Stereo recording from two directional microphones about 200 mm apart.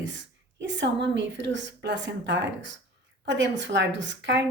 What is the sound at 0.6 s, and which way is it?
Speech, 65° right (ahead or behind).